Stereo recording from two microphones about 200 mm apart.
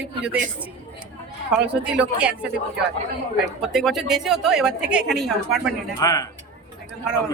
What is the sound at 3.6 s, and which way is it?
A woman's voice, centre (ahead or behind).